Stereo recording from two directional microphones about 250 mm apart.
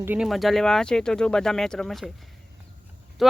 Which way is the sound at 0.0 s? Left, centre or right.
Centre.